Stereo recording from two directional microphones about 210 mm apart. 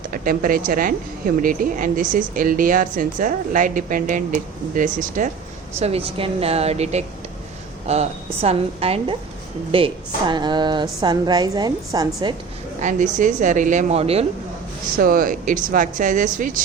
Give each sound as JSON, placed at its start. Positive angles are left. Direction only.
{"t": 0.1, "sound": "a woman's voice", "side_deg": -40}
{"t": 12.8, "sound": "a woman's voice", "side_deg": -35}
{"t": 14.9, "sound": "a woman's voice", "side_deg": -40}